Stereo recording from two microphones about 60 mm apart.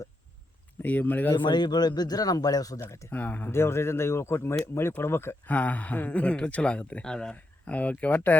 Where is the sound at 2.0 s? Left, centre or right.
Left.